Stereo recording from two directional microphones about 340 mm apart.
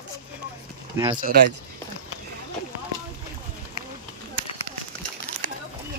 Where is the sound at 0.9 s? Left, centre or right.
Centre.